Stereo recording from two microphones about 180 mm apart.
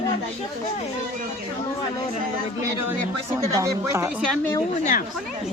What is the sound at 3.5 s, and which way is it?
Speech, 15° right (ahead or behind).